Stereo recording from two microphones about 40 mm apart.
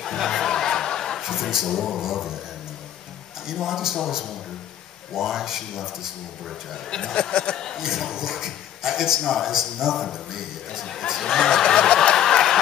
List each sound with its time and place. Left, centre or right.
0.0 s a sound: centre
1.2 s a sound: centre
2.0 s speech: centre
3.4 s speech: centre
5.1 s speech: centre
7.2 s speech: left
7.5 s speech: centre
7.8 s speech: centre
11.2 s a sound: centre